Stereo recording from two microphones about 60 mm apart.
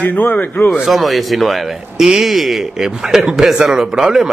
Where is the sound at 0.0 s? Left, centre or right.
Left.